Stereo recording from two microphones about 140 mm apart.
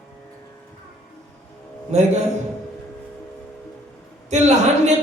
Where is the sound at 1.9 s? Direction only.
55° right (ahead or behind).